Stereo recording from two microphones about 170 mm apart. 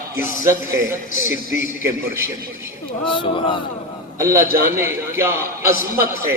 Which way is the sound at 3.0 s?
30° left (ahead or behind).